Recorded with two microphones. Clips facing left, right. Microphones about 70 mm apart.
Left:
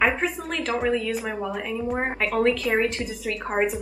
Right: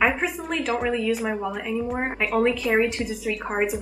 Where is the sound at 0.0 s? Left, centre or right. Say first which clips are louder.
Even; centre.